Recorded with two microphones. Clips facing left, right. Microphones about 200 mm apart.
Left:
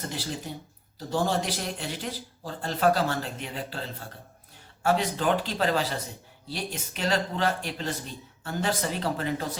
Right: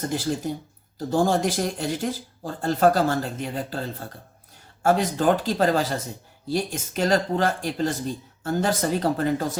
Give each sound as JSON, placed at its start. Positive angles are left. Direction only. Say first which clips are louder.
{"t": 0.1, "sound": "speech", "louder": "right 8 dB", "side_deg": -50}